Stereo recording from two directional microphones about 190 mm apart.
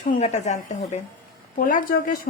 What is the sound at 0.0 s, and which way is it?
A woman's voice, 35° left (ahead or behind).